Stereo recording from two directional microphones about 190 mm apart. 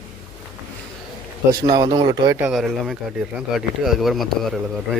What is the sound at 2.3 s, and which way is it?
Speech, 5° right (ahead or behind).